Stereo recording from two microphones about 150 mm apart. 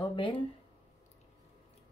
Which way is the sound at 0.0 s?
35° left (ahead or behind).